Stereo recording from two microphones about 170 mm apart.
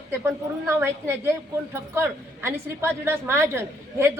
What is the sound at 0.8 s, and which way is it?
Speech, 15° right (ahead or behind).